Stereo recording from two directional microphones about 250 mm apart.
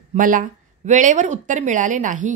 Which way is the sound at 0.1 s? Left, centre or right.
Right.